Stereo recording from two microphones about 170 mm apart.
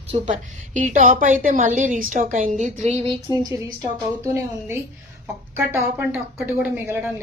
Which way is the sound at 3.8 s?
20° right (ahead or behind).